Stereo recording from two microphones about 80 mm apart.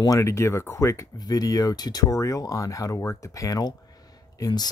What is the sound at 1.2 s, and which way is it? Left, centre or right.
Speech, left.